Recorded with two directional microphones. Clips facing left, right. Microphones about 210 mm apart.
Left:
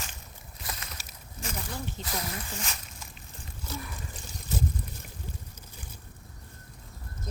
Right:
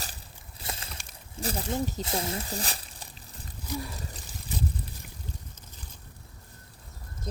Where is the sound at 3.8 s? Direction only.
30° right (ahead or behind).